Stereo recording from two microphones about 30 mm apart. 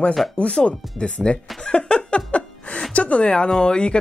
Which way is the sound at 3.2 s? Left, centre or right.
Left.